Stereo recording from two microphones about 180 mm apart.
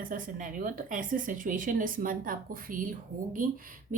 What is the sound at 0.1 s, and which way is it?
A woman's voice, 45° right (ahead or behind).